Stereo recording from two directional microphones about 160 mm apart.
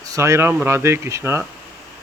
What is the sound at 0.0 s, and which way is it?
Speech, 20° right (ahead or behind).